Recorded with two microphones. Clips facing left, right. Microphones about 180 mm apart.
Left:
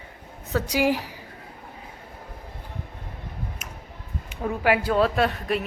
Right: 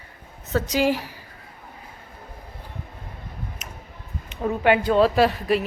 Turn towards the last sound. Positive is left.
turn(degrees=0)  # may be behind; listen again after turning